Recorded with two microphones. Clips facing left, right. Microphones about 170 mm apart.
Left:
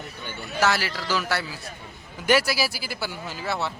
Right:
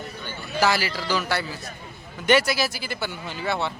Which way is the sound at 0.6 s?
Centre (ahead or behind).